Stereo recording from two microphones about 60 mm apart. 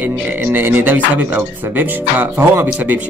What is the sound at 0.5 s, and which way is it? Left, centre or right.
Speech, right.